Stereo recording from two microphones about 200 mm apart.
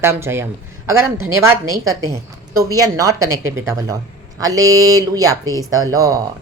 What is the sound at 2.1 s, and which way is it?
A woman's voice, 15° right (ahead or behind).